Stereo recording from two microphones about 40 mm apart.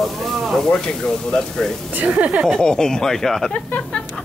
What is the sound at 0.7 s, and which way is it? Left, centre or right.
Speech, centre.